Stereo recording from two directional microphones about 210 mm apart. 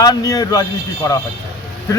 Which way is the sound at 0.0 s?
15° left (ahead or behind).